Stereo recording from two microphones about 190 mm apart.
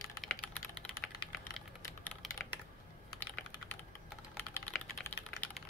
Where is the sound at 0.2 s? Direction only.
Centre (ahead or behind).